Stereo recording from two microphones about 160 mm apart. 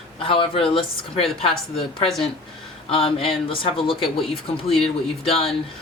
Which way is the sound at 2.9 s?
35° left (ahead or behind).